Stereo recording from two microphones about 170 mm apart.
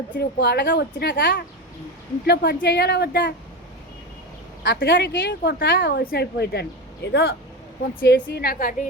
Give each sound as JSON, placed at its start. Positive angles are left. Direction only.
{"t": 0.2, "sound": "a woman's voice", "side_deg": 75}
{"t": 2.2, "sound": "speech", "side_deg": 75}
{"t": 4.6, "sound": "a woman's voice", "side_deg": 90}